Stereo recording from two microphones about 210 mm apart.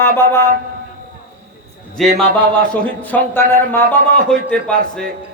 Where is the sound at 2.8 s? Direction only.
10° left (ahead or behind).